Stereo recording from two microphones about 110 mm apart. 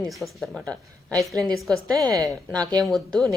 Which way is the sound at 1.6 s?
5° left (ahead or behind).